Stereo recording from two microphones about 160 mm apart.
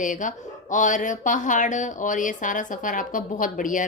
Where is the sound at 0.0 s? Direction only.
50° left (ahead or behind).